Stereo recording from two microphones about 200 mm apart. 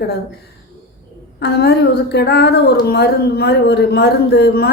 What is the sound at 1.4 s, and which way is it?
A woman's voice, 55° left (ahead or behind).